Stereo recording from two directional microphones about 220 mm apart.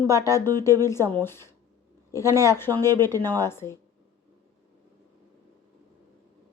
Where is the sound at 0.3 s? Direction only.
15° left (ahead or behind).